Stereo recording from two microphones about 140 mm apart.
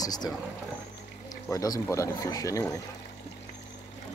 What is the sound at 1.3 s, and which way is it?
Speech, 25° left (ahead or behind).